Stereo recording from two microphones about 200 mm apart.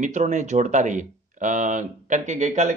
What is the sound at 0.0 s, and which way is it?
Speech, 35° right (ahead or behind).